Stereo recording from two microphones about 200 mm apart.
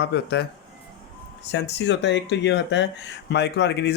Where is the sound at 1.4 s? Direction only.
55° left (ahead or behind).